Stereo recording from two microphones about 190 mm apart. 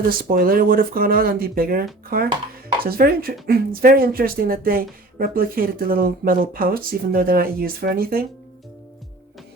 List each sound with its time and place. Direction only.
0.0 s speech: 50° right (ahead or behind)